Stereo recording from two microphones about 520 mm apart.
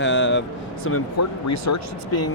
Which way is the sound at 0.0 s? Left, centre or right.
Left.